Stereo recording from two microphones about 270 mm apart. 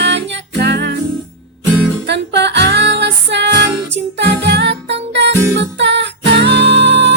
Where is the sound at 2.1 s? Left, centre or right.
Right.